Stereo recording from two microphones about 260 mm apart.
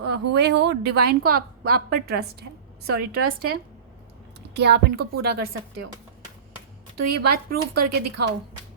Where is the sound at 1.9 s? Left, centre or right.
Right.